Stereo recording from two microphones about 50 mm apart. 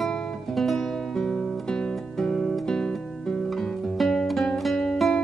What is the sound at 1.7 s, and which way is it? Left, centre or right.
Music, centre.